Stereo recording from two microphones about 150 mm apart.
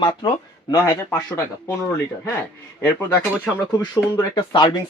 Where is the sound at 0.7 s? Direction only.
20° left (ahead or behind).